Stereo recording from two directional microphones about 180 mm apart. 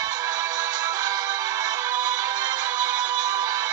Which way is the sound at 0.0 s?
20° right (ahead or behind).